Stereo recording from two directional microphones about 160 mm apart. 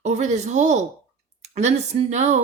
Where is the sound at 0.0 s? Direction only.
45° right (ahead or behind).